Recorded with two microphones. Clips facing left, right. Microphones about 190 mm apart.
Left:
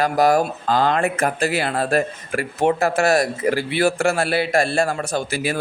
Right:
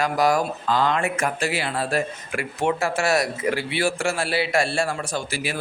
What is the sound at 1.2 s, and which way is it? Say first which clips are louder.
Speech: left 4 dB; 35° left (ahead or behind).